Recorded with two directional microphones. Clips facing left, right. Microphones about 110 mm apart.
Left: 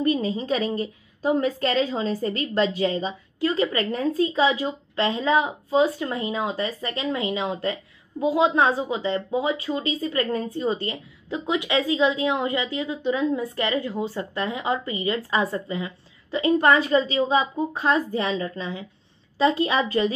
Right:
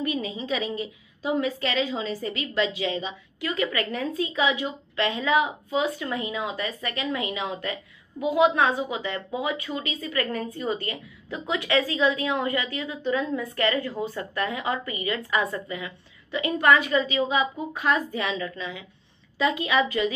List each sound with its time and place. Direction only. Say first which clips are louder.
0.0 s a woman's voice: left 6 dB; 40° left (ahead or behind)